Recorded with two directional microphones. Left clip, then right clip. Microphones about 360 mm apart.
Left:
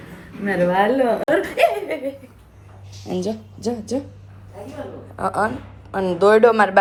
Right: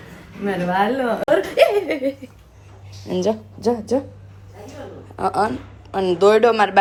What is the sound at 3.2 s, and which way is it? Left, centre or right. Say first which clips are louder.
Speech: right 6 dB; centre.